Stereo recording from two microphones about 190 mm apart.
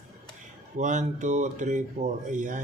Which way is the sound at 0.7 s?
40° right (ahead or behind).